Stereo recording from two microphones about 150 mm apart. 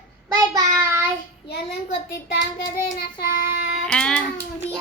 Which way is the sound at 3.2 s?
80° left.